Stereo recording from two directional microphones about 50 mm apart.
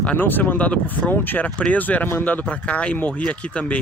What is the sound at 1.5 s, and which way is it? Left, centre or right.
Speech, left.